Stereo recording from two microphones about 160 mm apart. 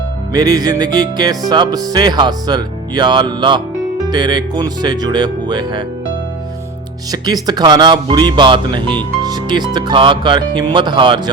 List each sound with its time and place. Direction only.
0.3 s music: 25° right (ahead or behind)
7.1 s music: 25° right (ahead or behind)